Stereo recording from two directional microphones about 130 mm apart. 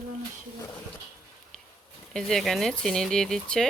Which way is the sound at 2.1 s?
Centre (ahead or behind).